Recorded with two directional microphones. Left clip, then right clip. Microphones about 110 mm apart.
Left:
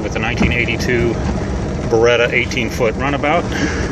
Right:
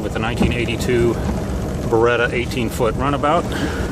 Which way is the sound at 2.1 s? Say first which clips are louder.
Left 4 dB; 10° right (ahead or behind).